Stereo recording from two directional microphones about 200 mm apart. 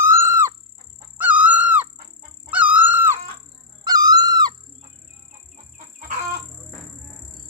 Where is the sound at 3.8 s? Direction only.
20° right (ahead or behind).